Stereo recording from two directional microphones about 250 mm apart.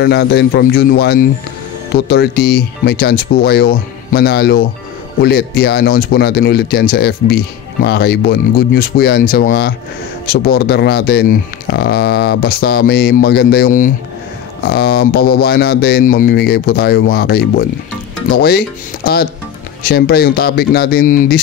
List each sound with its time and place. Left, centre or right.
0.0 s speech: left